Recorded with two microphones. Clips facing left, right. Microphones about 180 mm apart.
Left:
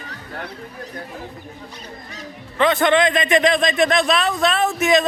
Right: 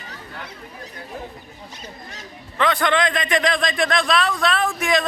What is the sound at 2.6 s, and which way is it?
A man's voice, 25° left (ahead or behind).